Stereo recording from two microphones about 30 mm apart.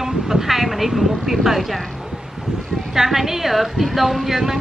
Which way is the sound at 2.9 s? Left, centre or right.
Centre.